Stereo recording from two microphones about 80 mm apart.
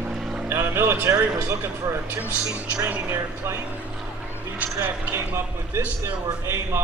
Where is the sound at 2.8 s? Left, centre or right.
Right.